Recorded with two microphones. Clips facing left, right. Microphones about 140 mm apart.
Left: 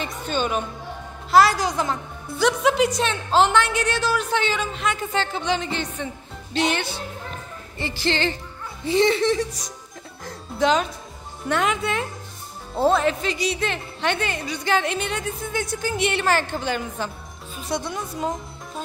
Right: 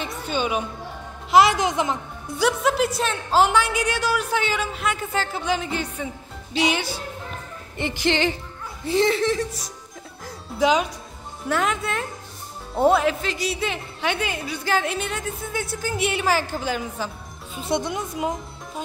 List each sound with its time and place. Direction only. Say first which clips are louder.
0.0 s a woman's voice: even; 10° right (ahead or behind)
1.3 s a woman's voice: even; 20° right (ahead or behind)
2.4 s a woman's voice: left 2 dB; 5° right (ahead or behind)
8.8 s speech: left 1 dB; centre (ahead or behind)
10.2 s music: even; 10° right (ahead or behind)
11.4 s speech: left 1 dB; centre (ahead or behind)
12.7 s speech: right 1 dB; 10° right (ahead or behind)
17.6 s a woman's voice: right 3 dB; 25° right (ahead or behind)